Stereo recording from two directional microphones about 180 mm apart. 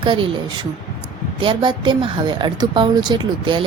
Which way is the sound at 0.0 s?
30° right (ahead or behind).